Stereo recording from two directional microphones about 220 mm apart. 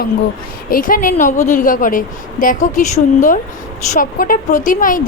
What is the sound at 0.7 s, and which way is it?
A woman's voice, 40° left (ahead or behind).